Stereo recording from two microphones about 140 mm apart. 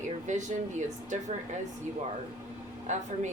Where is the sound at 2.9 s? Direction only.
60° right (ahead or behind).